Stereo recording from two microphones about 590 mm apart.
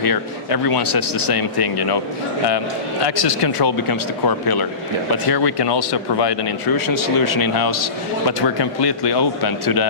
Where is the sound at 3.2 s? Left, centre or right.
Left.